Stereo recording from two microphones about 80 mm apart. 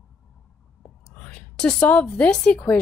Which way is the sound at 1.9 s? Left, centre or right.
Centre.